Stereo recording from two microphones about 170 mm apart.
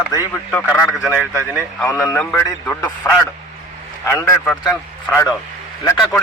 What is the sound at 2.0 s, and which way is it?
A man's voice, 15° left (ahead or behind).